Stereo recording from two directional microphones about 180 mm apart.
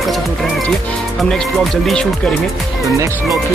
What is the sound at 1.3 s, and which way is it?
Speech, centre (ahead or behind).